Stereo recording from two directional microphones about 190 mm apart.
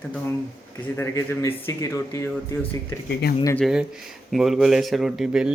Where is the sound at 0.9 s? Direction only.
15° left (ahead or behind).